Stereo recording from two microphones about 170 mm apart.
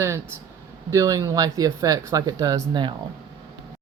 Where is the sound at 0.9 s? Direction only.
20° right (ahead or behind).